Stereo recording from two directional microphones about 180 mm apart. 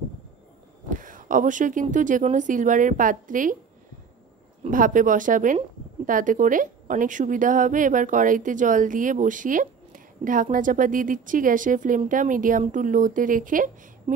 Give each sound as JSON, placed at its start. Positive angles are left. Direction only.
{"t": 0.9, "sound": "a woman's voice", "side_deg": -45}
{"t": 4.6, "sound": "a woman's voice", "side_deg": -45}